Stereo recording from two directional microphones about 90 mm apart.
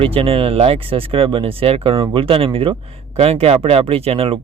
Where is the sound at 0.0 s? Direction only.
90° right.